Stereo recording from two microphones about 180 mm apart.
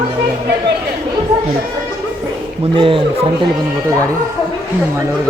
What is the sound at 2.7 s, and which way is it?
Speech, 30° right (ahead or behind).